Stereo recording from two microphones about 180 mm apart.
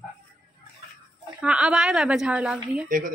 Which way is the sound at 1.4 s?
5° right (ahead or behind).